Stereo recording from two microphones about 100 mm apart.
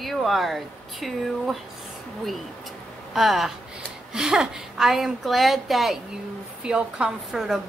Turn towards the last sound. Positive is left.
turn(degrees=-5)  # may be behind; listen again after turning